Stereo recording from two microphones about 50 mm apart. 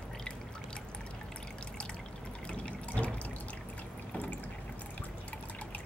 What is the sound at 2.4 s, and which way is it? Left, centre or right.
Water, left.